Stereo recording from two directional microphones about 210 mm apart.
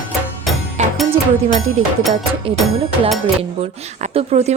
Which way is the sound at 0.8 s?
35° right (ahead or behind).